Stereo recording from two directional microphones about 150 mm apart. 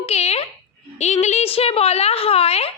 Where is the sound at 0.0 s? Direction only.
45° left (ahead or behind).